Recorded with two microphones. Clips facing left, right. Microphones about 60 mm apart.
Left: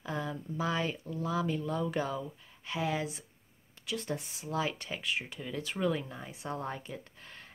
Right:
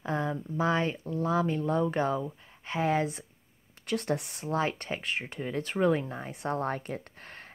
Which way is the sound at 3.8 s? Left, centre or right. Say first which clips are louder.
Right 6 dB; right.